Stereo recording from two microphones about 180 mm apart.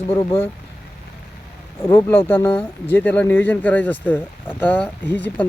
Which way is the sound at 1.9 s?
10° left (ahead or behind).